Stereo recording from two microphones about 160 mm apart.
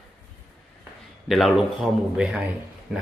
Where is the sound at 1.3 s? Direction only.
Centre (ahead or behind).